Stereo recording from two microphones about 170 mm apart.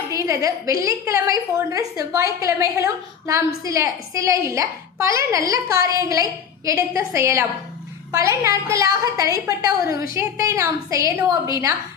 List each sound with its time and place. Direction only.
0.1 s a woman's voice: 20° right (ahead or behind)